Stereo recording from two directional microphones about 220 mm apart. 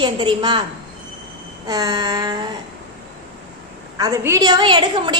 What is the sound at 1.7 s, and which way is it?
Speech, 15° right (ahead or behind).